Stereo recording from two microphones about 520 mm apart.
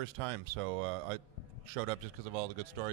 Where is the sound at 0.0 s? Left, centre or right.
Right.